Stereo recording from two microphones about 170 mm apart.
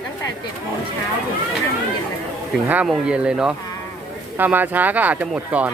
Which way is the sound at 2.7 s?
5° right (ahead or behind).